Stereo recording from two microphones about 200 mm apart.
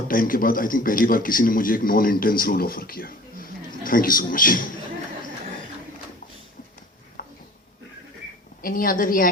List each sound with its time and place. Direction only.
0.1 s a man's voice: 45° left (ahead or behind)
7.2 s a sound: 45° left (ahead or behind)
8.6 s a man's voice: 45° left (ahead or behind)